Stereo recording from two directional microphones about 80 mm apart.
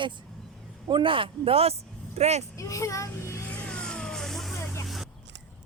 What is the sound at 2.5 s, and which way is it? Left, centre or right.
Speech, left.